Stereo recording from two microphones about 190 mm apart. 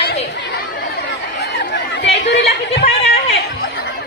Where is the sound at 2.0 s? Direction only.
65° left (ahead or behind).